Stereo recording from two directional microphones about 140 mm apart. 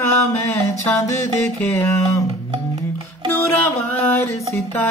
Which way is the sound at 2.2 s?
30° right (ahead or behind).